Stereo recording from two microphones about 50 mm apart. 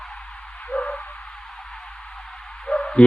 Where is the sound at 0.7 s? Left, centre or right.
Left.